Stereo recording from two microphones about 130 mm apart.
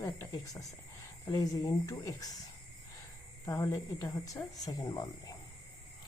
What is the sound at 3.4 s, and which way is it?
Speech, 25° left (ahead or behind).